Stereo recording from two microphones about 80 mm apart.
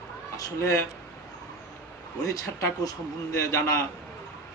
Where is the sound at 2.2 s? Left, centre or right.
Left.